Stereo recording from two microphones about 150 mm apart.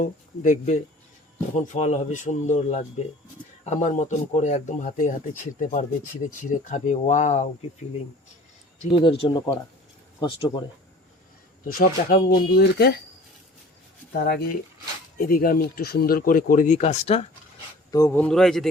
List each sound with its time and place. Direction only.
0.0 s a man's voice: 55° left (ahead or behind)
8.9 s speech: 35° left (ahead or behind)
11.6 s speech: 65° left (ahead or behind); by 13.0 s 90° left
14.1 s speech: 90° left
15.2 s speech: 75° left (ahead or behind); by 17.2 s 45° left (ahead or behind)
17.9 s speech: 20° left (ahead or behind)
18.2 s speech: 5° left (ahead or behind)